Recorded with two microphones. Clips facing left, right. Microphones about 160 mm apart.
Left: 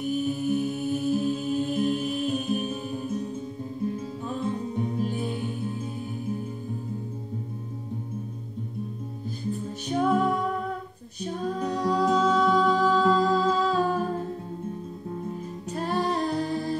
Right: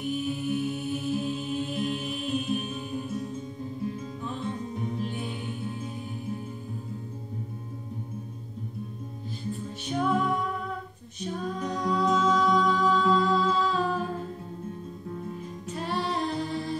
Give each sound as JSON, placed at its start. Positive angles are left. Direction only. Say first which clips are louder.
{"t": 0.0, "sound": "music", "louder": "left 3 dB", "side_deg": 40}
{"t": 4.9, "sound": "music", "louder": "left 4 dB", "side_deg": 40}
{"t": 9.5, "sound": "music", "louder": "left 3 dB", "side_deg": 40}
{"t": 11.1, "sound": "music", "louder": "left 3 dB", "side_deg": 35}
{"t": 15.7, "sound": "female singing", "louder": "left 4 dB", "side_deg": 45}